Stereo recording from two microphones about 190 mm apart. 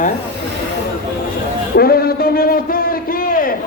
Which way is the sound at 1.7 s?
55° left (ahead or behind).